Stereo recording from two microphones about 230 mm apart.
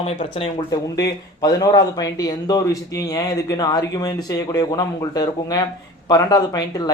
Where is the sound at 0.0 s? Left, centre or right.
Left.